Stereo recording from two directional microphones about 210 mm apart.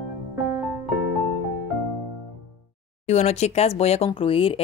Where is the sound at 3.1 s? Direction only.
30° left (ahead or behind).